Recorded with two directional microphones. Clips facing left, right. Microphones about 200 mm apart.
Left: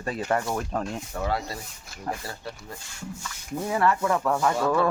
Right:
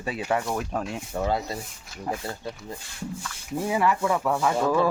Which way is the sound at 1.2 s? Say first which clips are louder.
Right 2 dB; 20° right (ahead or behind).